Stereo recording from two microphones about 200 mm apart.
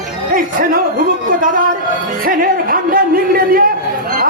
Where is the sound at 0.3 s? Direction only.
45° right (ahead or behind).